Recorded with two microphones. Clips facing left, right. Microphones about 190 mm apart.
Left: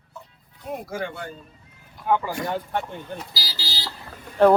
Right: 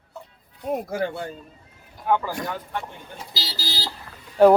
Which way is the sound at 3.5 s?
50° right (ahead or behind).